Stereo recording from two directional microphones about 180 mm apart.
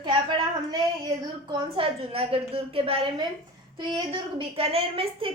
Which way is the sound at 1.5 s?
30° right (ahead or behind).